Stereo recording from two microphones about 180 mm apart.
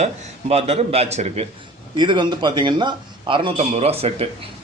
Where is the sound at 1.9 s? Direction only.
25° right (ahead or behind).